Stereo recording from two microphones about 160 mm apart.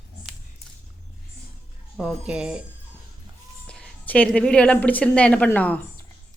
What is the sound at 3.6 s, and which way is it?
A woman's voice, 5° left (ahead or behind).